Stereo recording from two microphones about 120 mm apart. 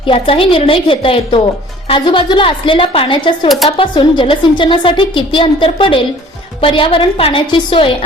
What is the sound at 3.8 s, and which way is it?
A woman's voice, 45° left (ahead or behind).